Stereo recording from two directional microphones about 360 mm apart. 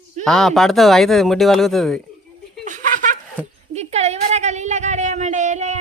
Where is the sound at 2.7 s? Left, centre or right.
Right.